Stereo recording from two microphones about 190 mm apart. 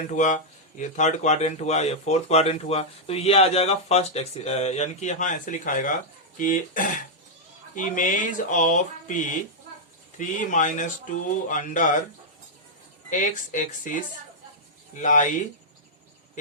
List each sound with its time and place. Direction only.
0.1 s speech: 40° left (ahead or behind)
13.1 s speech: 45° left (ahead or behind)